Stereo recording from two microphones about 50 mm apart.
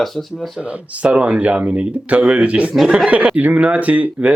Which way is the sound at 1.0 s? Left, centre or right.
Right.